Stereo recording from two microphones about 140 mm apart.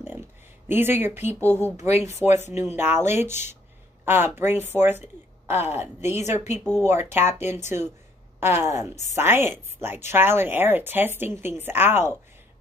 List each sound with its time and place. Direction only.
0.0 s a sound: 15° right (ahead or behind)
1.4 s speech: 15° right (ahead or behind)
1.8 s speech: 50° left (ahead or behind)
2.6 s speech: 15° right (ahead or behind)